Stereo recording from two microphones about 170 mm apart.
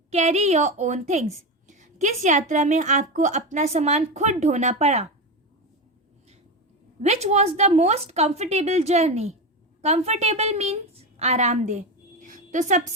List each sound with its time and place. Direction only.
0.1 s a woman's voice: 40° right (ahead or behind)
7.0 s a woman's voice: 40° right (ahead or behind)